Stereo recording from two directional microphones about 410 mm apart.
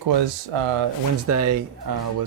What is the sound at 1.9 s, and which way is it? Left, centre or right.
Speech, right.